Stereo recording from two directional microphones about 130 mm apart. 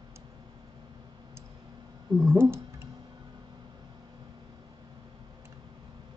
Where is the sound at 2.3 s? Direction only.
20° right (ahead or behind).